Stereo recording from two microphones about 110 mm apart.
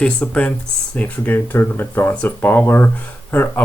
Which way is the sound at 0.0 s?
10° left (ahead or behind).